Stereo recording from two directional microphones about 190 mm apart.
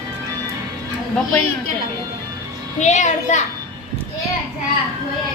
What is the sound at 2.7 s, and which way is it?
Speech, 40° left (ahead or behind).